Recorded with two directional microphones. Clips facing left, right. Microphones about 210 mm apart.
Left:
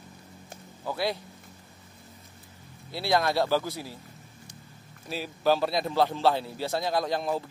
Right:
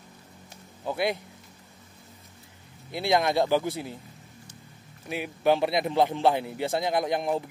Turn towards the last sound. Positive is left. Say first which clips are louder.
# right 2 dB
turn(degrees=-20)  # may be behind; listen again after turning